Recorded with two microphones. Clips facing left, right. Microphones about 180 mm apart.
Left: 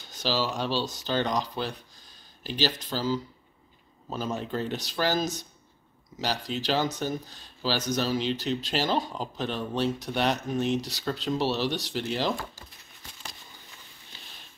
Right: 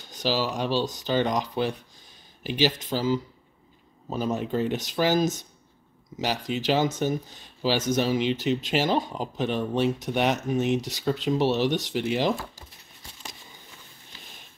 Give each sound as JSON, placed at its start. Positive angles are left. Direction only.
{"t": 0.1, "sound": "speech", "side_deg": -15}
{"t": 4.3, "sound": "speech", "side_deg": -10}
{"t": 6.5, "sound": "speech", "side_deg": -15}
{"t": 8.1, "sound": "speech", "side_deg": -15}